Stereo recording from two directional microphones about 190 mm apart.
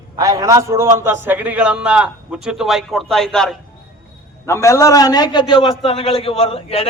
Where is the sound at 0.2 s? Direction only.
20° right (ahead or behind); by 3.6 s 5° left (ahead or behind).